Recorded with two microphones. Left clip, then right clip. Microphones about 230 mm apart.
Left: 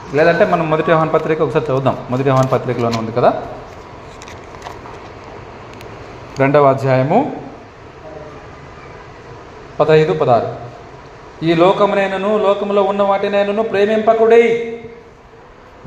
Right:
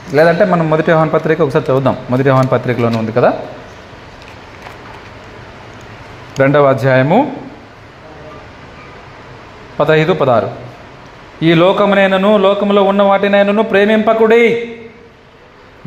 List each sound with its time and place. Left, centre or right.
0.1 s a man's voice: right
6.3 s a man's voice: right
9.7 s a man's voice: right